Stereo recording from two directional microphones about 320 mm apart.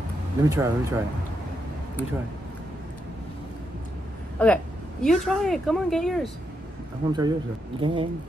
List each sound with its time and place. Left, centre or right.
0.4 s speech: centre
4.4 s speech: centre
7.1 s speech: centre